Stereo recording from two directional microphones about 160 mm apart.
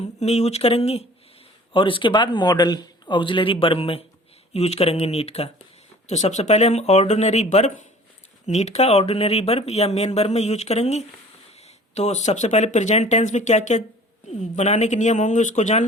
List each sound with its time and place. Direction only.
0.0 s speech: 45° left (ahead or behind)